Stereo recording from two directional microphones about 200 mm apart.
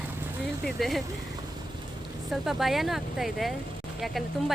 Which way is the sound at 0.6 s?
Centre (ahead or behind).